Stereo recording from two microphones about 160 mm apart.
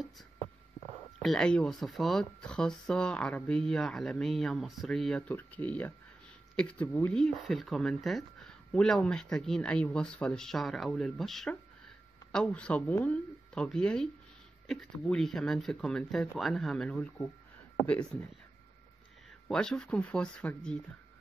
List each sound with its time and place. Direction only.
1.2 s speech: 5° left (ahead or behind)
19.4 s speech: 5° left (ahead or behind)